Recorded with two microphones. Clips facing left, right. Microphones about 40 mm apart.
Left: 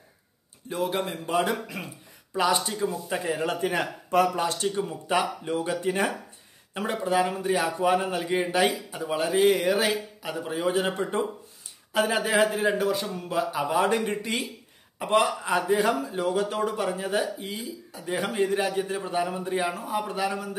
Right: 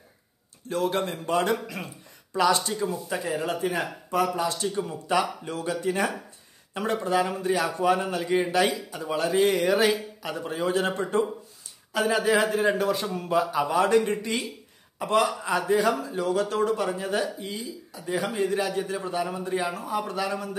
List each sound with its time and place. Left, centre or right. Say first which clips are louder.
0.7 s a man's voice: right 2 dB; centre
2.7 s a man's voice: even; centre
3.1 s speech: left 1 dB; left
3.5 s speech: left 1 dB; left
4.7 s speech: even; left
6.7 s a man's voice: right 1 dB; centre
11.9 s speech: right 1 dB; left
12.5 s a man's voice: right 1 dB; centre
14.2 s speech: even; left
16.5 s a man's voice: right 2 dB; centre; by 18.7 s left
18.7 s speech: even; centre